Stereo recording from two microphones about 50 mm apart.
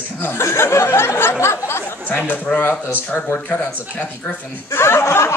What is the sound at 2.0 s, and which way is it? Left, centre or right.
Speech, left.